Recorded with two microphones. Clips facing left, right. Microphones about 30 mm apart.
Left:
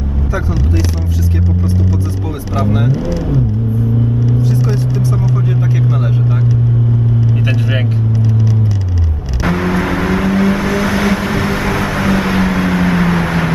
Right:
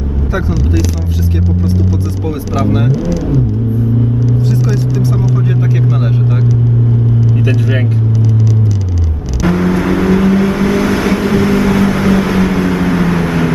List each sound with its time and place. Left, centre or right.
2.6 s speech: centre
4.5 s vehicle: right
9.5 s vehicle: centre